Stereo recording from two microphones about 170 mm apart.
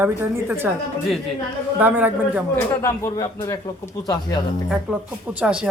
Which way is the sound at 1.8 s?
10° right (ahead or behind).